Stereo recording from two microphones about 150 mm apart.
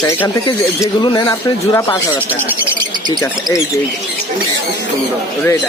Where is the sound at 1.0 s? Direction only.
30° left (ahead or behind).